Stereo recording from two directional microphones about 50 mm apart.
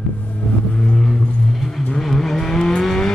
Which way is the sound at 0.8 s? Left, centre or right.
Centre.